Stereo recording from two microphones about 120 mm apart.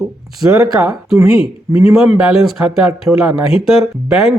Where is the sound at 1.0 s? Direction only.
Centre (ahead or behind).